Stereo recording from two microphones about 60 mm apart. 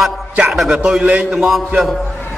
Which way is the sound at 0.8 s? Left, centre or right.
Centre.